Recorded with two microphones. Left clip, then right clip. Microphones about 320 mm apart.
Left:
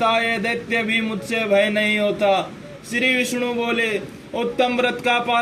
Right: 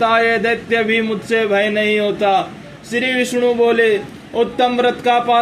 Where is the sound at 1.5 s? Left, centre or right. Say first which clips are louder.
Right 3 dB; left.